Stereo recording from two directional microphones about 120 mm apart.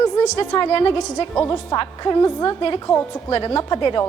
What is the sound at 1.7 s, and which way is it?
Speech, 35° left (ahead or behind).